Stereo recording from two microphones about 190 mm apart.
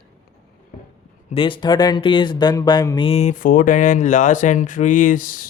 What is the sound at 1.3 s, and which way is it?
Speech, 25° left (ahead or behind).